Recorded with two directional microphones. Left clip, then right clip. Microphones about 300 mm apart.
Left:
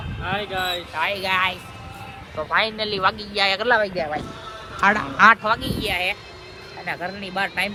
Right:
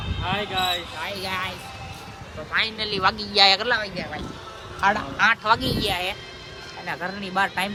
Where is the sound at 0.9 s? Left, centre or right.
Centre.